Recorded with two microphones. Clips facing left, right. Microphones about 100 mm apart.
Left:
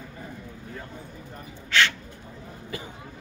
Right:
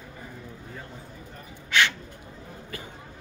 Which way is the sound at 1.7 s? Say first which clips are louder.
Even; 15° right (ahead or behind).